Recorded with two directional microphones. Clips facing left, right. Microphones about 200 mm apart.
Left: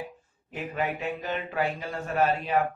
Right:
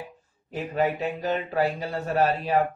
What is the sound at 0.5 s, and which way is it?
Speech, 40° right (ahead or behind).